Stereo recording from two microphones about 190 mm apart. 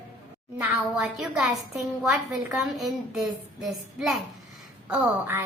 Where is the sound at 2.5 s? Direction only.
Centre (ahead or behind).